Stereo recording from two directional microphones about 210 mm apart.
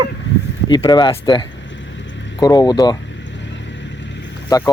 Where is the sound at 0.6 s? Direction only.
20° left (ahead or behind).